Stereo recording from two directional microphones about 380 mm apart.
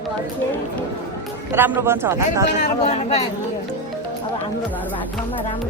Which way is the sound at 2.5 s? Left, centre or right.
Centre.